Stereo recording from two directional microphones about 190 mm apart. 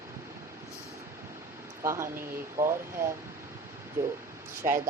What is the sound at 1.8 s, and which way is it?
Speech, 15° right (ahead or behind).